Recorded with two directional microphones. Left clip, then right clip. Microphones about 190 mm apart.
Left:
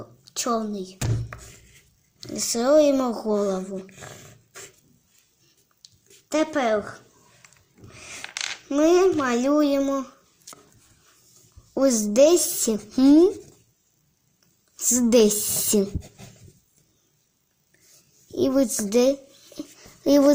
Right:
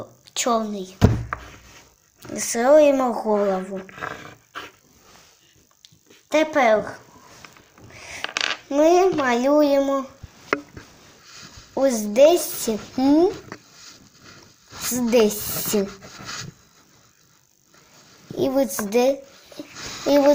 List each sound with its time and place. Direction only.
0.3 s a woman's voice: 25° left (ahead or behind)
2.3 s speech: 30° left (ahead or behind)
5.8 s a sound: 20° left (ahead or behind)
7.9 s a sound: 35° left (ahead or behind)
8.7 s speech: 35° left (ahead or behind)
11.8 s speech: 45° left (ahead or behind)
14.9 s speech: 50° left (ahead or behind)
18.3 s speech: 45° left (ahead or behind)